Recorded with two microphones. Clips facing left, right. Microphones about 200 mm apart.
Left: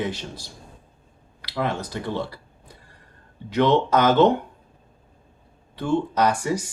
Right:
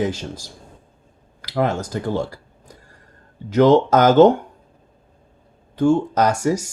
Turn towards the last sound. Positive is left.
turn(degrees=-45)  # may be behind; listen again after turning